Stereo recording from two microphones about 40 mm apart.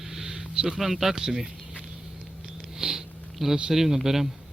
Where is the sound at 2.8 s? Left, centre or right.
Centre.